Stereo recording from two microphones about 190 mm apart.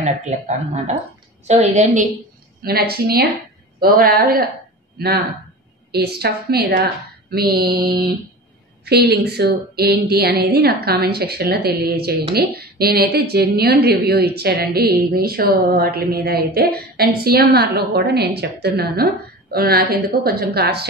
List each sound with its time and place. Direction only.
0.0 s a woman's voice: 40° right (ahead or behind)
2.6 s a woman's voice: 55° right (ahead or behind)